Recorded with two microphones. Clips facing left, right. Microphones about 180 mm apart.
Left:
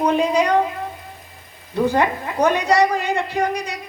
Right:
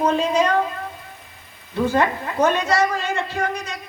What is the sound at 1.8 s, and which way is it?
A woman's voice, 15° left (ahead or behind).